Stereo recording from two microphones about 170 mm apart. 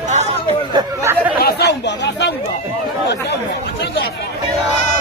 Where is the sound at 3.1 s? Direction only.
80° left.